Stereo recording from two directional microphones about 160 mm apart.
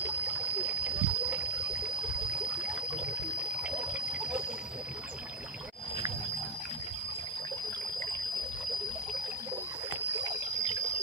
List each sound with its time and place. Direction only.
0.0 s a sound: 10° right (ahead or behind)
3.6 s trickle: 10° right (ahead or behind)
10.2 s trickle: 30° right (ahead or behind)